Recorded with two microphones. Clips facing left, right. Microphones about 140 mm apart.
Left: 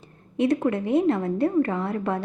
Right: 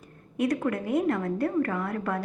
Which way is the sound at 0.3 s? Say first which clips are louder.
Left 4 dB; 25° left (ahead or behind).